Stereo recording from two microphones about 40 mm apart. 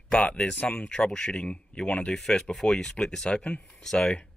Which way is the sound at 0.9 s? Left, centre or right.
Centre.